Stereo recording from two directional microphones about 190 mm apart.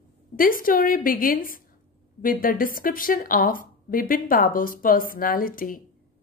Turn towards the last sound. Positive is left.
turn(degrees=45)  # may be behind; listen again after turning